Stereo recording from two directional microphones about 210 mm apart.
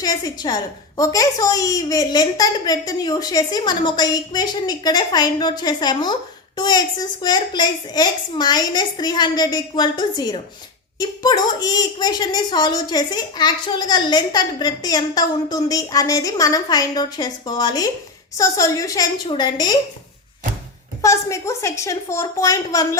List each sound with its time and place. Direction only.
0.0 s a woman's voice: 20° left (ahead or behind)
21.0 s a woman's voice: 15° left (ahead or behind)